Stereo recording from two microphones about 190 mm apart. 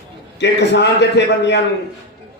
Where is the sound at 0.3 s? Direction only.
65° left (ahead or behind).